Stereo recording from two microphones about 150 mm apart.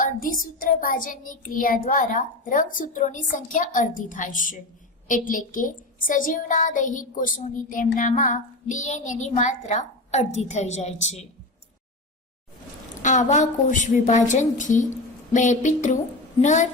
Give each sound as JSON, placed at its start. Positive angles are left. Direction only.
{"t": 0.0, "sound": "a woman's voice", "side_deg": 70}
{"t": 13.0, "sound": "a woman's voice", "side_deg": 55}